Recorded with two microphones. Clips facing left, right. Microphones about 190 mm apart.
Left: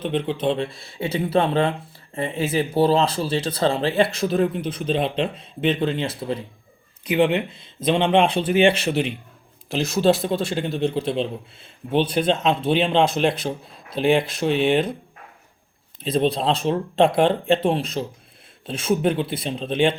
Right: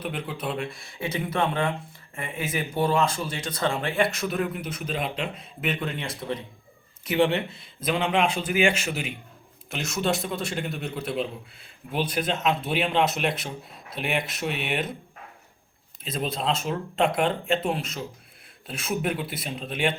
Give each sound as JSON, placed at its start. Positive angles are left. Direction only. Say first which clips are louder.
{"t": 0.0, "sound": "speech", "louder": "left 9 dB", "side_deg": 25}
{"t": 16.0, "sound": "speech", "louder": "left 7 dB", "side_deg": 30}